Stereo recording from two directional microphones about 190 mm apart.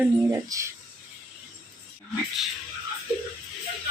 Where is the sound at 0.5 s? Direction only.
15° right (ahead or behind).